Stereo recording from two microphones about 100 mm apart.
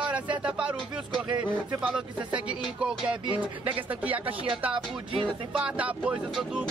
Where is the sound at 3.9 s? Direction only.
15° right (ahead or behind).